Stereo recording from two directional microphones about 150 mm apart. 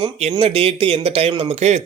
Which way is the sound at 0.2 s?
45° right (ahead or behind).